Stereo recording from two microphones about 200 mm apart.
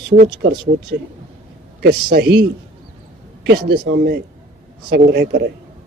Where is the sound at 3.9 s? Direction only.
50° right (ahead or behind).